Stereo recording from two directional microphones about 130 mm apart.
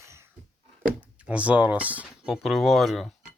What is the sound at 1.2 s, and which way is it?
Speech, 10° right (ahead or behind).